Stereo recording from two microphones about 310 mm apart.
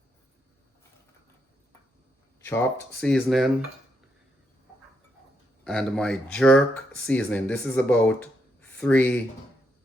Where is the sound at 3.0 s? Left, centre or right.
Centre.